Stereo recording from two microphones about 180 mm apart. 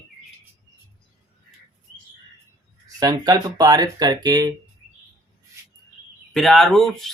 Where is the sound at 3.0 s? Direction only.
20° right (ahead or behind).